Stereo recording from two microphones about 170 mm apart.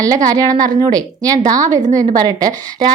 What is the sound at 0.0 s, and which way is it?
A woman's voice, 20° right (ahead or behind).